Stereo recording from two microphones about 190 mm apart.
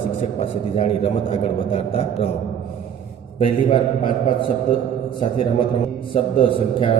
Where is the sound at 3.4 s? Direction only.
30° left (ahead or behind).